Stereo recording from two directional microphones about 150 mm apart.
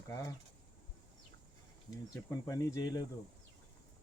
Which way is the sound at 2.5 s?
20° left (ahead or behind).